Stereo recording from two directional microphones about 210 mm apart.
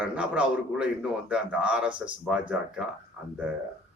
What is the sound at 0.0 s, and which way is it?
A man's voice, 5° right (ahead or behind).